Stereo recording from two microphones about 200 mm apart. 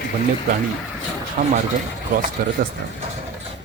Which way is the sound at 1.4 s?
40° right (ahead or behind).